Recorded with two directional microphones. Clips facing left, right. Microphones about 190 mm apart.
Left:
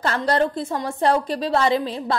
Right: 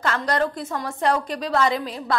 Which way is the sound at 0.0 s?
30° left (ahead or behind).